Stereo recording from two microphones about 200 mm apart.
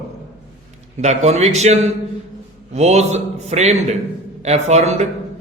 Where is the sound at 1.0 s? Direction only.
35° right (ahead or behind).